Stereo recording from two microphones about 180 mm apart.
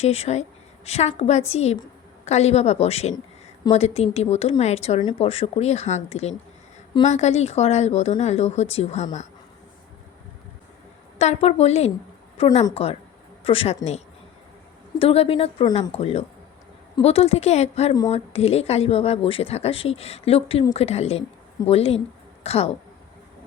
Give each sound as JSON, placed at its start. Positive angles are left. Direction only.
{"t": 0.0, "sound": "speech", "side_deg": 35}
{"t": 11.2, "sound": "speech", "side_deg": 35}